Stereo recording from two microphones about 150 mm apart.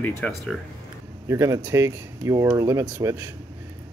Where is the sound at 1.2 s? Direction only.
20° right (ahead or behind).